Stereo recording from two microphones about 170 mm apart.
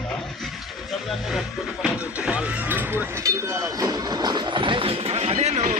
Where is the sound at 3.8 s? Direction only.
25° right (ahead or behind).